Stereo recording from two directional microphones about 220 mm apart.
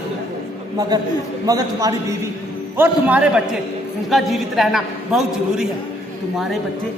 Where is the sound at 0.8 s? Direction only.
20° right (ahead or behind); by 5.6 s centre (ahead or behind).